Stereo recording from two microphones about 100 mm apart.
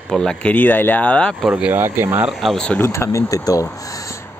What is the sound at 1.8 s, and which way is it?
Speech, 20° right (ahead or behind).